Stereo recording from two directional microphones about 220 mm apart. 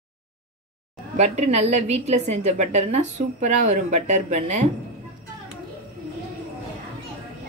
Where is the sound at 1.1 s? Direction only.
30° right (ahead or behind).